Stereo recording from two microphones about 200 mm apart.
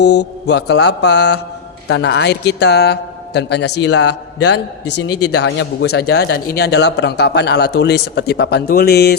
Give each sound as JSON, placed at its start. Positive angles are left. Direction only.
{"t": 0.0, "sound": "a man's voice", "side_deg": 60}
{"t": 5.3, "sound": "a man's voice", "side_deg": 75}
{"t": 5.9, "sound": "a man's voice", "side_deg": 55}